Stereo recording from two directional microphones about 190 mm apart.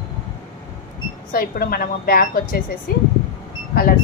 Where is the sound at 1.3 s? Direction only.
50° left (ahead or behind).